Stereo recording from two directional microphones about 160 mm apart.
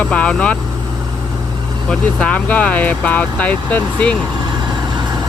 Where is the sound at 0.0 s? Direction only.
5° left (ahead or behind).